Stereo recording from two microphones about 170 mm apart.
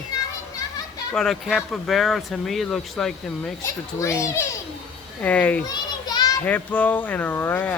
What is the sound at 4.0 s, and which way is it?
Speech, 15° left (ahead or behind).